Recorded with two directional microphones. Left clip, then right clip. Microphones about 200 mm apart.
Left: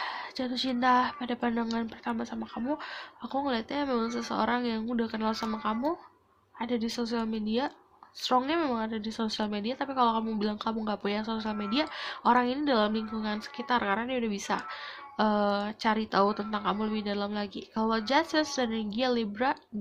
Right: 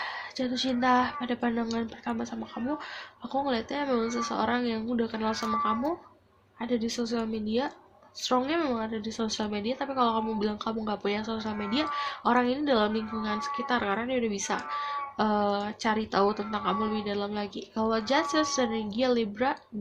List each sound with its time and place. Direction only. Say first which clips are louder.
0.0 s a woman's voice: right 1 dB; 35° left (ahead or behind)